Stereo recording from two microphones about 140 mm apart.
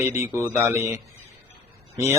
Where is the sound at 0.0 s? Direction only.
20° right (ahead or behind).